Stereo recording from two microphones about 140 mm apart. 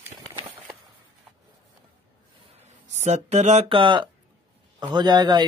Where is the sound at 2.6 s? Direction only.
55° right (ahead or behind).